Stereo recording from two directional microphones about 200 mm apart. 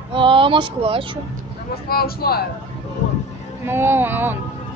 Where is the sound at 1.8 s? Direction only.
50° left (ahead or behind).